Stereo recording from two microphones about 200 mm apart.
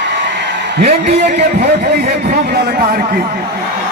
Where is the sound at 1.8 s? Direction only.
50° right (ahead or behind).